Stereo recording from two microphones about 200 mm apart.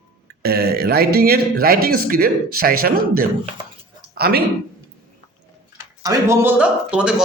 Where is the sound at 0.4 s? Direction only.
50° right (ahead or behind).